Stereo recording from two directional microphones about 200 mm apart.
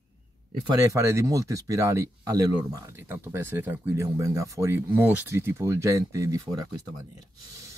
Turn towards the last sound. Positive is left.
turn(degrees=-20)  # may be behind; listen again after turning